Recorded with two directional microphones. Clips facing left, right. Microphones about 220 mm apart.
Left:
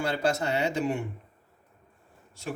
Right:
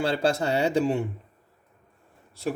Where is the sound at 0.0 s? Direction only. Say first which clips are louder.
Right 3 dB; 30° right (ahead or behind).